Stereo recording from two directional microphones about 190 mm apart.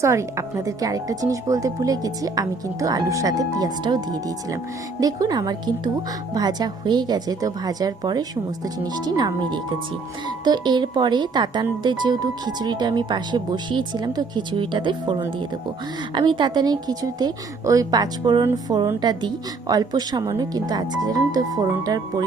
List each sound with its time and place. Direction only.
0.0 s speech: 15° right (ahead or behind)